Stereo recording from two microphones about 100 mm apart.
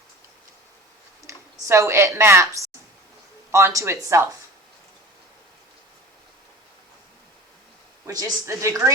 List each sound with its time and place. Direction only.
1.3 s a woman's voice: 30° right (ahead or behind)
8.0 s a woman's voice: 30° right (ahead or behind)